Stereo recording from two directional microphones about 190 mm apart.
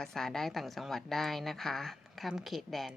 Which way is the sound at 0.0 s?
5° left (ahead or behind).